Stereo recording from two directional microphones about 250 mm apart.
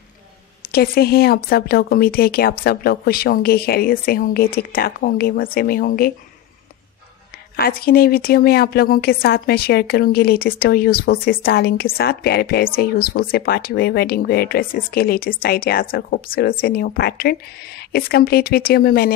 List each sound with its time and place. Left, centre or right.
0.7 s a woman's voice: left
7.5 s a woman's voice: left